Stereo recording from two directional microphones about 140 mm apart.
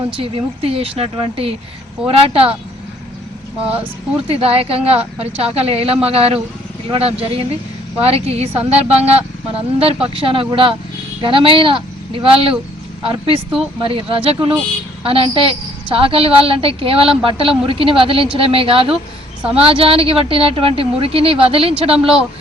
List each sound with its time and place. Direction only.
0.2 s a woman's voice: 40° right (ahead or behind)
4.3 s a woman's voice: 45° right (ahead or behind)